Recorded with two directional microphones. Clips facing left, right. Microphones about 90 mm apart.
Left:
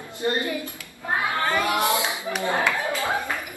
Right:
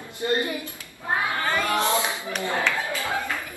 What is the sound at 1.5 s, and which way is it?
Clapping, 15° left (ahead or behind).